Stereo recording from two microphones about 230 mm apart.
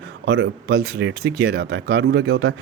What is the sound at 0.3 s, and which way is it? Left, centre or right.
Speech, right.